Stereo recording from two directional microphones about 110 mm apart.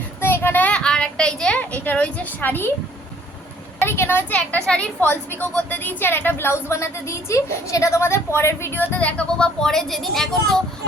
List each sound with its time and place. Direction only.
0.2 s a sound: 20° left (ahead or behind)
3.8 s speech: 20° left (ahead or behind)
4.4 s a woman's voice: 10° left (ahead or behind)